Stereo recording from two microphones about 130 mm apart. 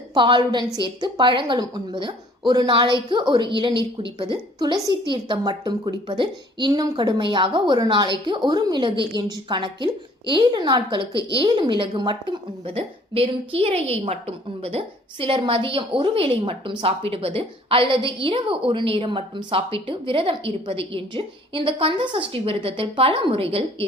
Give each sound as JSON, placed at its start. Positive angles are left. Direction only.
{"t": 0.1, "sound": "a woman's voice", "side_deg": -35}